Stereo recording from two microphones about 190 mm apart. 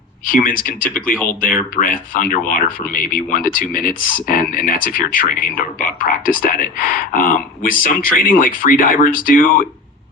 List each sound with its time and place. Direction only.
0.3 s speech: 45° left (ahead or behind)